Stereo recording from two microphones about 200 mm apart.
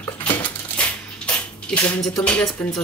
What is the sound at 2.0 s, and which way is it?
Speech, 5° left (ahead or behind).